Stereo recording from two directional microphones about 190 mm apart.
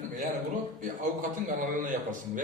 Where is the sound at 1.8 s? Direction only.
45° right (ahead or behind).